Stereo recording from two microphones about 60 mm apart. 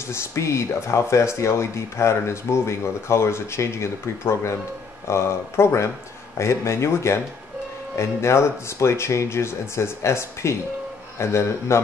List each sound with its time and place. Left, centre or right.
0.1 s speech: left